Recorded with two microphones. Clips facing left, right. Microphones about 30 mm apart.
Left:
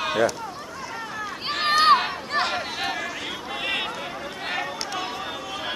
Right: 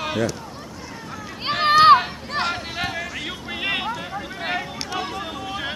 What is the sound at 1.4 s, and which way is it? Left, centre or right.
Run, centre.